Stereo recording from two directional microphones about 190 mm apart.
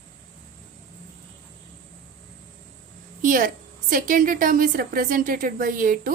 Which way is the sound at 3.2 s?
45° right (ahead or behind).